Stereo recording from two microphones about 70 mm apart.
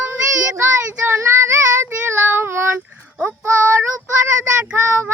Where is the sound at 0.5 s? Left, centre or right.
Right.